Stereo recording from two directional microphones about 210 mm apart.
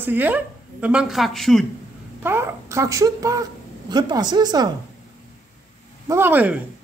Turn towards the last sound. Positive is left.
turn(degrees=-10)  # may be behind; listen again after turning